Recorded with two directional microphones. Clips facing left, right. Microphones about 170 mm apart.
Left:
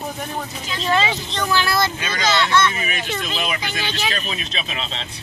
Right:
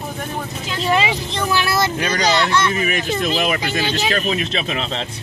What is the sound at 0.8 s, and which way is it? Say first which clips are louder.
Speech: right 2 dB; 10° right (ahead or behind).